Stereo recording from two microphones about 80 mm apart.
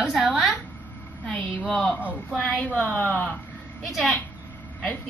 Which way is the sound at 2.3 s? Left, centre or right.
Centre.